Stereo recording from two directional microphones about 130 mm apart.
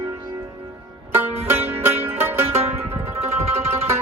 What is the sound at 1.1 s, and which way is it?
Music, 15° right (ahead or behind).